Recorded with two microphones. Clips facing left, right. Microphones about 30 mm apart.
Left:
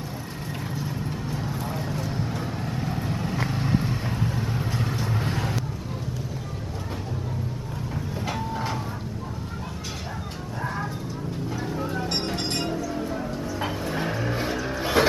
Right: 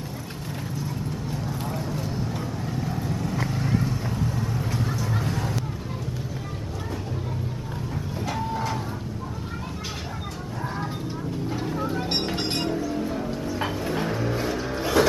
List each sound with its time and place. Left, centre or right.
1.7 s vehicle: centre
2.6 s vehicle: left
11.6 s music: centre
12.1 s music: centre
13.6 s vehicle: centre
15.0 s music: left